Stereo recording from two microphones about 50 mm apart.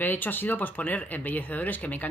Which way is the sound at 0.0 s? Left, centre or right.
Left.